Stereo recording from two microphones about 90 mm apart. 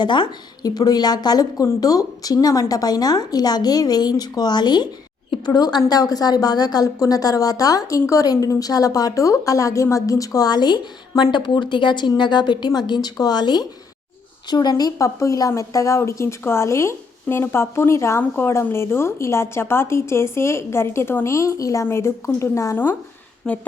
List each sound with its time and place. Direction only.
0.0 s a woman's voice: 60° left (ahead or behind); by 22.7 s 35° left (ahead or behind)
22.7 s a woman's voice: 20° left (ahead or behind)
23.4 s a woman's voice: 5° left (ahead or behind)